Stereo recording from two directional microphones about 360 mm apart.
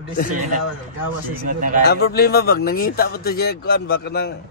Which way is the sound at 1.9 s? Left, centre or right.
Left.